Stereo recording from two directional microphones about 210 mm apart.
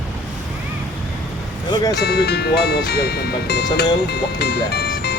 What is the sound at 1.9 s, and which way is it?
Speech, 50° left (ahead or behind).